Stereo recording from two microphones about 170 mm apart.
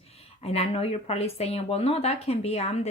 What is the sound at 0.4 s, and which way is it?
Speech, 35° left (ahead or behind).